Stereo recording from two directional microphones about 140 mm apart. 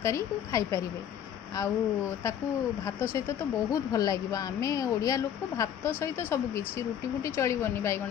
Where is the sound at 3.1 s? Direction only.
20° left (ahead or behind).